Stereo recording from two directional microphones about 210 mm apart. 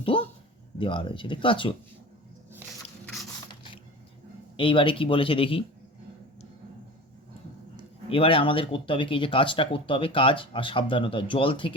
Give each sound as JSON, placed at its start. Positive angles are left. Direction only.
{"t": 0.1, "sound": "a sound", "side_deg": 25}
{"t": 0.8, "sound": "speech", "side_deg": 25}
{"t": 4.5, "sound": "speech", "side_deg": 25}
{"t": 8.1, "sound": "speech", "side_deg": 25}